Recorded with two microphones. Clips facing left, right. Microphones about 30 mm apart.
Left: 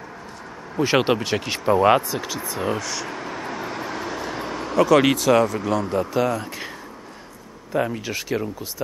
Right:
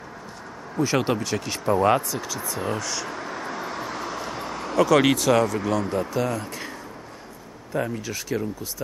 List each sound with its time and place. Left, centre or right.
0.7 s speech: left
2.8 s vehicle: centre
6.0 s speech: centre
7.7 s speech: left